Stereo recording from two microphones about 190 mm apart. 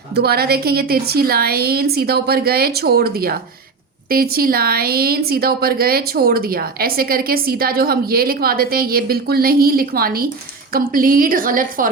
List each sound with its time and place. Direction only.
0.1 s a woman's voice: 55° right (ahead or behind)